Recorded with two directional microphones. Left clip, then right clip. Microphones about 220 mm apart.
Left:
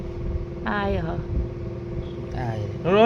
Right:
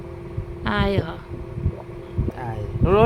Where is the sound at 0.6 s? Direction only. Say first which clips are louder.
Right 3 dB; 20° right (ahead or behind).